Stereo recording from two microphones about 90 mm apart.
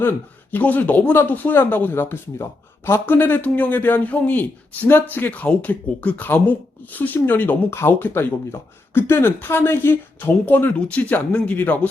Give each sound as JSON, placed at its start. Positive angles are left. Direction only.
{"t": 0.5, "sound": "speech", "side_deg": 20}